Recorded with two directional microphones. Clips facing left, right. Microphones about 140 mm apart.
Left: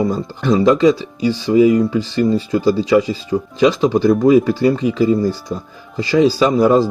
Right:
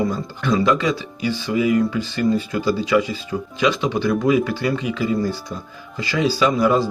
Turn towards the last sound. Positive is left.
turn(degrees=40)  # may be behind; listen again after turning